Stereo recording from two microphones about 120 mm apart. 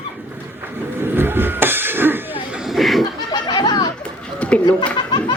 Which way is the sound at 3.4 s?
35° left (ahead or behind).